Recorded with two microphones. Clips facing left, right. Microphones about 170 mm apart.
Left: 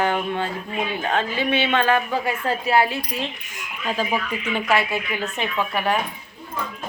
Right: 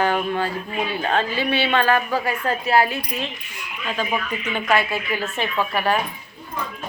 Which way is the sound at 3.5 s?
40° left (ahead or behind).